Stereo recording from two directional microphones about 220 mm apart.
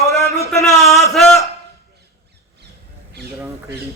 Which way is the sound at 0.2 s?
Centre (ahead or behind).